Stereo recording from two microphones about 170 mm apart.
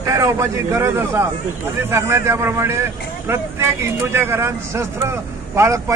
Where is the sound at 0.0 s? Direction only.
20° right (ahead or behind).